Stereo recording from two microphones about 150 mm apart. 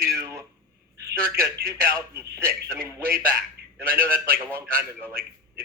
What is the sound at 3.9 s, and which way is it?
A man's voice, 15° right (ahead or behind).